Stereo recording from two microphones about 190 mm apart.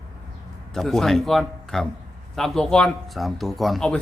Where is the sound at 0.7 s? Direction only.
Centre (ahead or behind).